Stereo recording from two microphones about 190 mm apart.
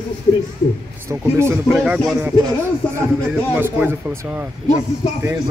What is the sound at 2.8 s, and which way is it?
Speech, 5° left (ahead or behind).